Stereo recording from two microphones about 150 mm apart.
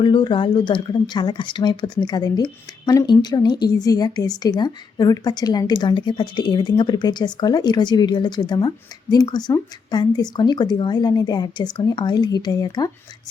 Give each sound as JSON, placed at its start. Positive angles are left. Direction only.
{"t": 0.0, "sound": "speech", "side_deg": 30}